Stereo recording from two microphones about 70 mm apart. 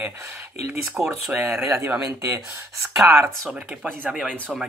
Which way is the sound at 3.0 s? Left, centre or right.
Right.